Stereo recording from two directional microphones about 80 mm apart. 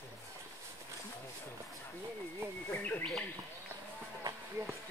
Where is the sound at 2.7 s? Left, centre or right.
Left.